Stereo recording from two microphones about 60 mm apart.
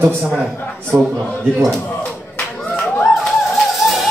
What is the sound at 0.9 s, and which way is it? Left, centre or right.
Speech, right.